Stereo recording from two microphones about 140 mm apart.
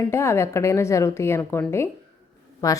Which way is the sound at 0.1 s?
20° left (ahead or behind).